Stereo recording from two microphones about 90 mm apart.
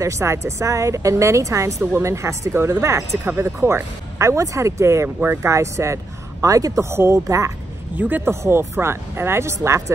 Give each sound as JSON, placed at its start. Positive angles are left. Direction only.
{"t": 0.0, "sound": "speech", "side_deg": -30}
{"t": 7.9, "sound": "speech", "side_deg": -20}